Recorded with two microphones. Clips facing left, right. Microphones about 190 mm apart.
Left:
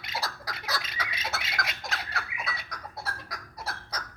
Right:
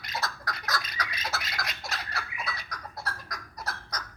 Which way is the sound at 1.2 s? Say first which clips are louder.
Left 3 dB; centre (ahead or behind).